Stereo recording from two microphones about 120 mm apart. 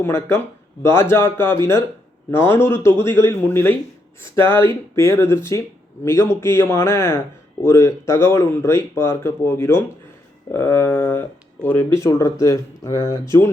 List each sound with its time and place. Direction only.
0.0 s speech: 20° left (ahead or behind)